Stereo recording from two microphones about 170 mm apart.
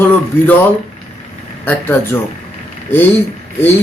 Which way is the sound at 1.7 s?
10° left (ahead or behind).